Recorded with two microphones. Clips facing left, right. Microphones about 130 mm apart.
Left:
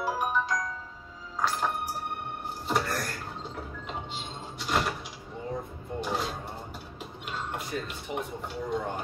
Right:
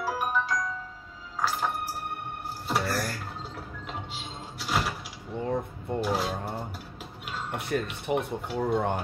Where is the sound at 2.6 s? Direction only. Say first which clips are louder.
Right 1 dB; centre (ahead or behind).